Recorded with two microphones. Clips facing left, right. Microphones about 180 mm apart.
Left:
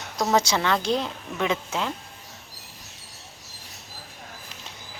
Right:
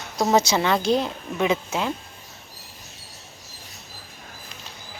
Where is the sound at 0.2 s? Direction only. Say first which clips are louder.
Right 3 dB; 20° right (ahead or behind).